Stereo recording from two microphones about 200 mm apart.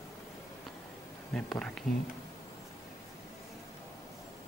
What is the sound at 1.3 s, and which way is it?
Speech, 5° left (ahead or behind).